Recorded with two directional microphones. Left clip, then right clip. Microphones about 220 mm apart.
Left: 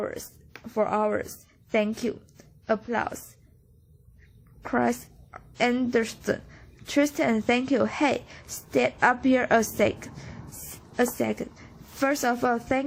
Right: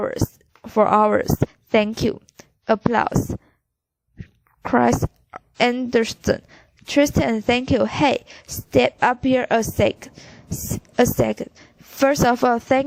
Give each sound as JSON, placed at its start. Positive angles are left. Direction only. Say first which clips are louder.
{"t": 0.0, "sound": "a woman's voice", "louder": "right 8 dB", "side_deg": -40}
{"t": 4.6, "sound": "a woman's voice", "louder": "right 8 dB", "side_deg": -35}